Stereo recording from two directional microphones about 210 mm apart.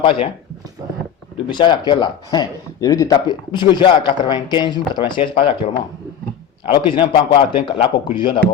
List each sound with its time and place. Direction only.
0.0 s speech: 25° left (ahead or behind)
1.5 s speech: 20° left (ahead or behind)
6.7 s speech: 20° left (ahead or behind)